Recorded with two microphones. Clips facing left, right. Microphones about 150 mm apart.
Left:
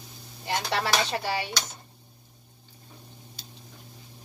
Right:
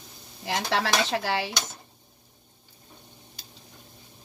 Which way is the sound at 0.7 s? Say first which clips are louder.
Right 2 dB; 90° right.